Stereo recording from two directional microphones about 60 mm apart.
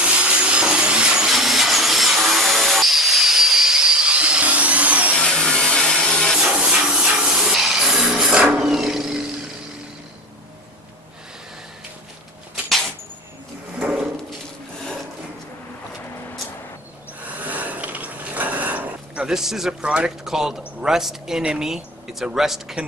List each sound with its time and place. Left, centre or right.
0.0 s sawing: centre
5.1 s vacuum cleaner: centre
6.5 s music: centre
8.5 s wild animals: centre
17.3 s a sound: right
19.2 s a man's voice: centre